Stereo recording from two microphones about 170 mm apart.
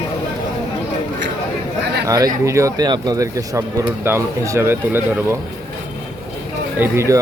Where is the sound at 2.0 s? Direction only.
20° right (ahead or behind).